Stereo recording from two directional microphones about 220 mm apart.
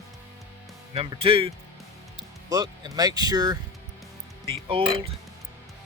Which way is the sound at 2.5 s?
15° right (ahead or behind).